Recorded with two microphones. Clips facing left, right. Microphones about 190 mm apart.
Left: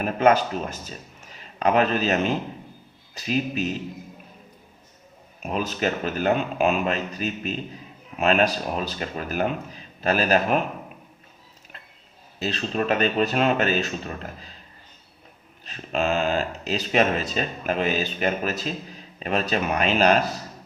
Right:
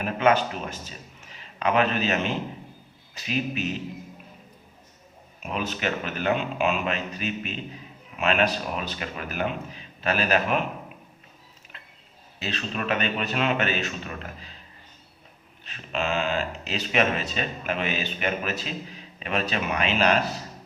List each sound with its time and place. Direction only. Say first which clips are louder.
0.0 s a man's voice: left 3 dB; 40° left (ahead or behind)
5.4 s speech: left 3 dB; 40° left (ahead or behind)
12.4 s speech: left 5 dB; 35° left (ahead or behind)
15.6 s speech: left 4 dB; 40° left (ahead or behind)